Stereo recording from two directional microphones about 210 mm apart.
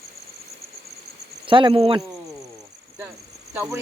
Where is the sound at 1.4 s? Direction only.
25° right (ahead or behind).